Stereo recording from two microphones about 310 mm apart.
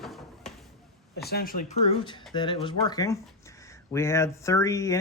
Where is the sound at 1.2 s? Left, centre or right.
Left.